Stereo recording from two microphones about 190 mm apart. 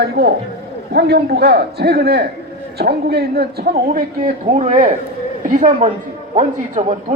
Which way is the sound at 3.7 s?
45° right (ahead or behind).